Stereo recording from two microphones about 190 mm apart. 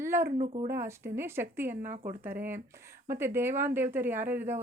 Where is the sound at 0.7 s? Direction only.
15° right (ahead or behind).